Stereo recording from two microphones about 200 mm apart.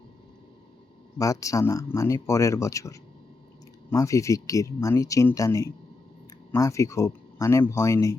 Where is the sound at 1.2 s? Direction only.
15° left (ahead or behind).